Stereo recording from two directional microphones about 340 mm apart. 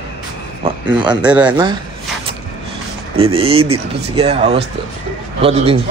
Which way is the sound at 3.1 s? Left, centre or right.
Centre.